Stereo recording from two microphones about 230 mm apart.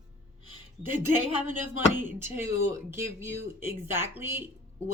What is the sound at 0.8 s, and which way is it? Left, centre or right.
Speech, centre.